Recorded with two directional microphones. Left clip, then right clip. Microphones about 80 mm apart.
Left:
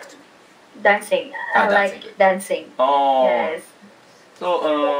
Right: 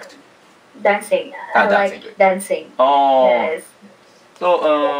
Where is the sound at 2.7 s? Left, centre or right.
Centre.